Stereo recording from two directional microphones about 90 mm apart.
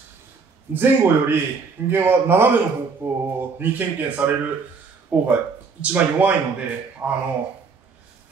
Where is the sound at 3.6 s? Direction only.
20° right (ahead or behind).